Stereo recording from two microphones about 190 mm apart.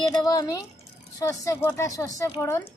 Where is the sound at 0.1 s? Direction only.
20° left (ahead or behind).